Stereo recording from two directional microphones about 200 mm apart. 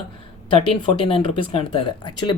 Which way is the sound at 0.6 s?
30° left (ahead or behind).